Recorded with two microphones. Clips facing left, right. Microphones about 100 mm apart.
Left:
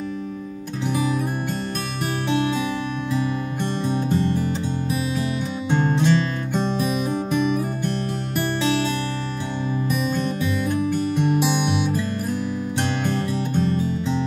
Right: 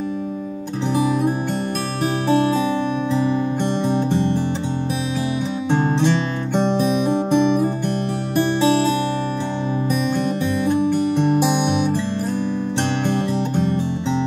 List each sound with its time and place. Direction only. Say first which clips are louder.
3.1 s music: right 4 dB; 20° right (ahead or behind)
5.7 s music: right 1 dB; 20° right (ahead or behind)
10.7 s music: right 6 dB; 20° right (ahead or behind)
13.0 s music: right 3 dB; 20° right (ahead or behind)